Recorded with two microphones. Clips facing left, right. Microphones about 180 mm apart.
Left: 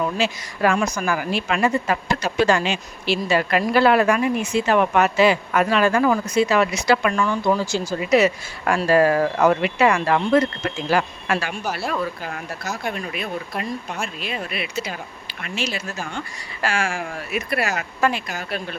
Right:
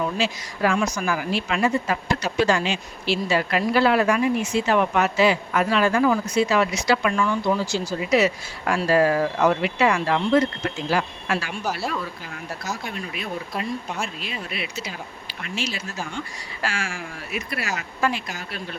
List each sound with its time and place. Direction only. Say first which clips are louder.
0.2 s speech: left 2 dB; 55° left (ahead or behind)
14.2 s speech: left 3 dB; 60° left (ahead or behind)